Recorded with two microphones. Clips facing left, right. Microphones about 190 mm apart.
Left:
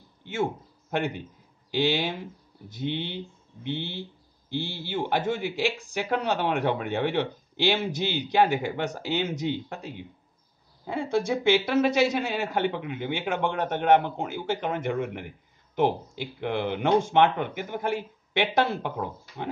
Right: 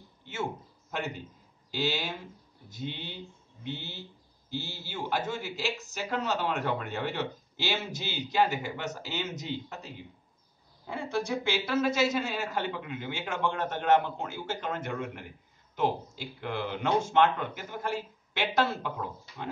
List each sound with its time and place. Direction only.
0.2 s a man's voice: 55° left (ahead or behind)
10.9 s speech: 60° left (ahead or behind)